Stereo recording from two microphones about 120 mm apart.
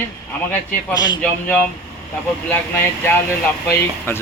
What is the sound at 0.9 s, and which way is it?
Speech, 35° left (ahead or behind).